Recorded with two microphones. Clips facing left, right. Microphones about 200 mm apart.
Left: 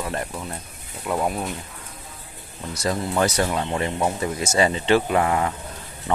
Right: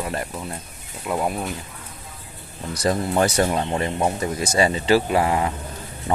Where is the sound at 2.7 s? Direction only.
30° right (ahead or behind).